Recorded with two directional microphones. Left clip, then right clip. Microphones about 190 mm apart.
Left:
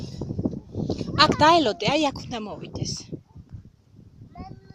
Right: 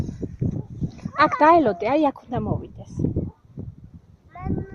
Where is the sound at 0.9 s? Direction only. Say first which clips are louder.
Even; 15° left (ahead or behind).